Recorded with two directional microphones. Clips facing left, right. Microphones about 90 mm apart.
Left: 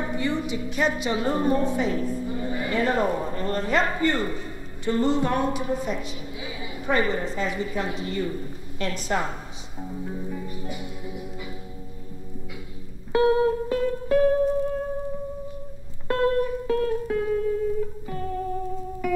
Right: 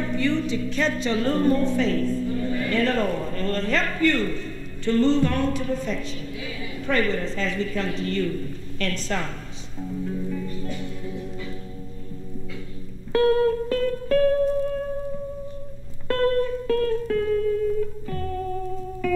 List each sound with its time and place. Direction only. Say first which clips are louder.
0.0 s a woman's voice: right 3 dB; 20° left (ahead or behind)
9.8 s music: right 4 dB; 20° left (ahead or behind)
13.1 s music: right 1 dB; 20° left (ahead or behind)
16.1 s music: right 1 dB; 20° left (ahead or behind)